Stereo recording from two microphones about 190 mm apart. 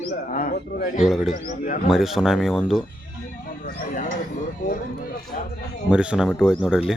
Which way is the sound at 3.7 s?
50° left (ahead or behind).